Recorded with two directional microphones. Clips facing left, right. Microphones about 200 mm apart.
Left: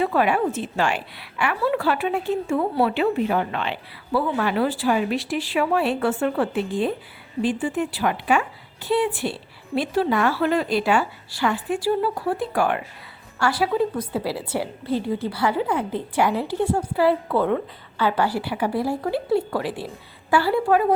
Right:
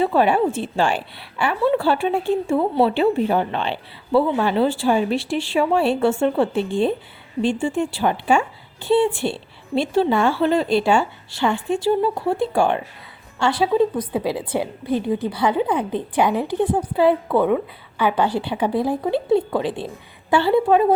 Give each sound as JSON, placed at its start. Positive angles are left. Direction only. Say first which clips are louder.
{"t": 0.0, "sound": "a woman's voice", "louder": "right 3 dB", "side_deg": -30}